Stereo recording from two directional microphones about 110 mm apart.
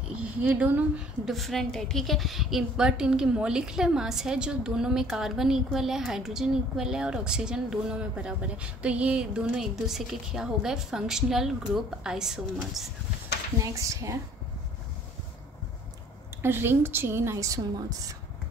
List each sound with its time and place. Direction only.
0.1 s a woman's voice: 10° right (ahead or behind)
1.2 s a woman's voice: centre (ahead or behind)
13.6 s a woman's voice: 30° right (ahead or behind)
16.4 s a woman's voice: 20° right (ahead or behind)